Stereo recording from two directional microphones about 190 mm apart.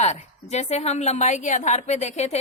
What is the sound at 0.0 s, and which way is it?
A woman's voice, 35° left (ahead or behind).